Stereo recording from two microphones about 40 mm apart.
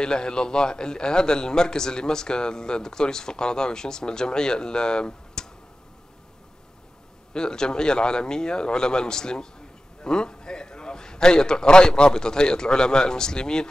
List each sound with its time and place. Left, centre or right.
0.0 s a man's voice: centre
7.3 s a man's voice: centre